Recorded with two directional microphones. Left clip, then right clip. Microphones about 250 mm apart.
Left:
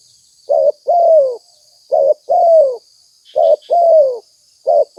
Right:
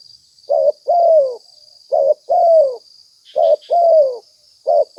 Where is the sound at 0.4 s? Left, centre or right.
Left.